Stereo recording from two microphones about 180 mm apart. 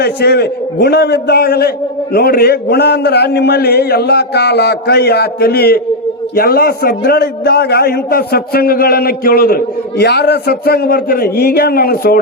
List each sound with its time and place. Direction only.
0.0 s a man's voice: 65° left (ahead or behind)